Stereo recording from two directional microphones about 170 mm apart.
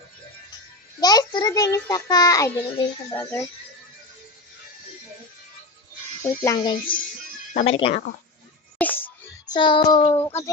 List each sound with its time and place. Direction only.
1.0 s a child's voice: 25° left (ahead or behind)
6.2 s speech: 20° left (ahead or behind)
7.5 s speech: 35° left (ahead or behind)
8.8 s music: 10° left (ahead or behind)
9.5 s a child's voice: 30° left (ahead or behind)
10.2 s speech: 15° left (ahead or behind)